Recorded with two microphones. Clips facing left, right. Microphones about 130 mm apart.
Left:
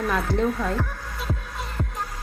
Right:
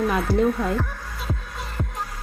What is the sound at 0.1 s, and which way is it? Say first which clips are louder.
Speech: right 3 dB; 5° right (ahead or behind).